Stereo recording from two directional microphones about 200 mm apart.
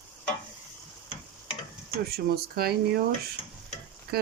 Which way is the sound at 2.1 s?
50° right (ahead or behind).